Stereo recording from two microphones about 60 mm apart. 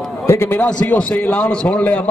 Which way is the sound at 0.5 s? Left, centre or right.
Centre.